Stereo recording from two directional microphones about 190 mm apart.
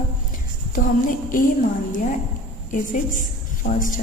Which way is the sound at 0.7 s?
45° left (ahead or behind).